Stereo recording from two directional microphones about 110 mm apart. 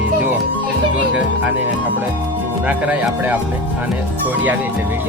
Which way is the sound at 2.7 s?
10° right (ahead or behind).